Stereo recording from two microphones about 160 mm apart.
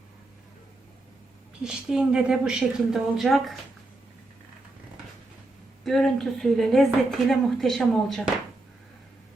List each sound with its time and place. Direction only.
1.6 s a woman's voice: 5° right (ahead or behind)
5.8 s a woman's voice: centre (ahead or behind)